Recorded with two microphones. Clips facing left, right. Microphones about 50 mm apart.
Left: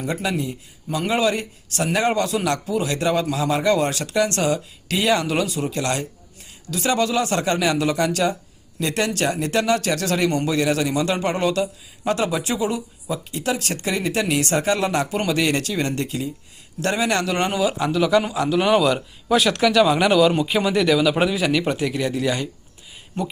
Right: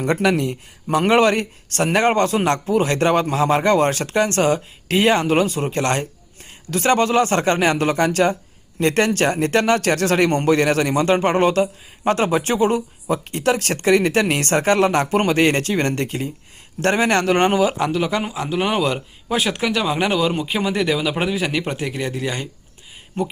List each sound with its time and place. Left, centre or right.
0.0 s speech: right
18.2 s speech: right